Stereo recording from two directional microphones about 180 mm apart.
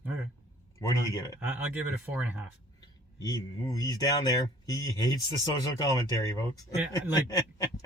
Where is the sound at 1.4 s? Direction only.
10° right (ahead or behind).